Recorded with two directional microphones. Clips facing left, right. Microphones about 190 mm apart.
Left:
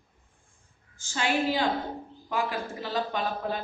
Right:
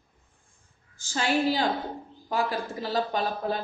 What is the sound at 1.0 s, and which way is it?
A woman's voice, 35° right (ahead or behind).